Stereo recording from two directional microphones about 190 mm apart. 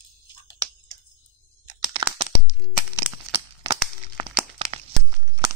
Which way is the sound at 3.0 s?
10° right (ahead or behind).